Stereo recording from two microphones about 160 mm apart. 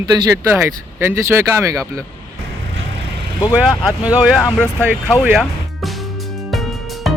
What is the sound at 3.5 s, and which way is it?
Speech, 5° right (ahead or behind).